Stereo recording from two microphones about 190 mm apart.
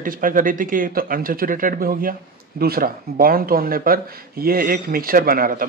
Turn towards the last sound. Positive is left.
turn(degrees=-50)  # may be behind; listen again after turning